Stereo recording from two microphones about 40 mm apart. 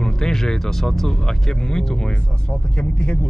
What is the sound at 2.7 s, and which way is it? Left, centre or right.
Speech, left.